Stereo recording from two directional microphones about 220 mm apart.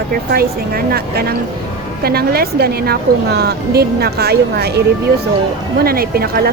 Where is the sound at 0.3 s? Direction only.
45° right (ahead or behind).